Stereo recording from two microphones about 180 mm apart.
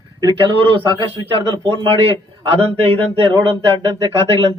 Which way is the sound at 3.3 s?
20° right (ahead or behind).